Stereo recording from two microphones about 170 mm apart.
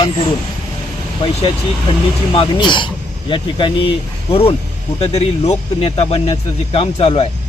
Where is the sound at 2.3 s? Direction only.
30° left (ahead or behind).